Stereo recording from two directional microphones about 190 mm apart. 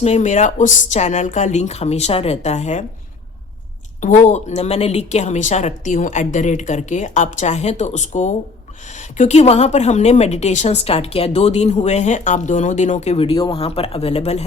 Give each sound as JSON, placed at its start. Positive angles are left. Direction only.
{"t": 0.0, "sound": "a woman's voice", "side_deg": 40}
{"t": 4.0, "sound": "a woman's voice", "side_deg": 40}